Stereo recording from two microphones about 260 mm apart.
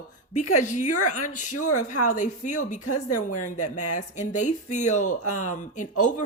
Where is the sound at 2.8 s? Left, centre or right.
Left.